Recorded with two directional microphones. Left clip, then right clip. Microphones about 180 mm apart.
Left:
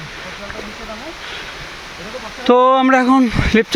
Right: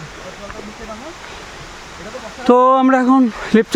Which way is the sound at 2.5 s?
25° right (ahead or behind).